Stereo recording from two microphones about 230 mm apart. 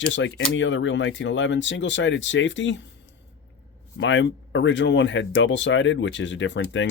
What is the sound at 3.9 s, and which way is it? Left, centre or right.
Speech, left.